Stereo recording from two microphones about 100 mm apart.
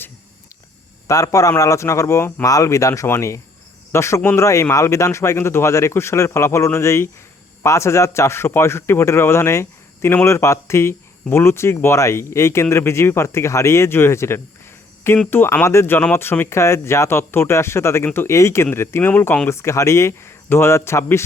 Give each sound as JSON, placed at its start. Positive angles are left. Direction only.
{"t": 1.0, "sound": "speech", "side_deg": 35}